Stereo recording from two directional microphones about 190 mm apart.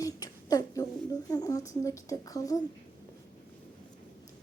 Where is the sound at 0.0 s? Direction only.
20° left (ahead or behind).